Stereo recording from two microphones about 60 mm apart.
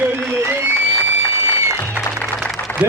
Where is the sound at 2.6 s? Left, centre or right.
Left.